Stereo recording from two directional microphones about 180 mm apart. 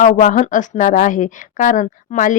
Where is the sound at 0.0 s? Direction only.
45° left (ahead or behind).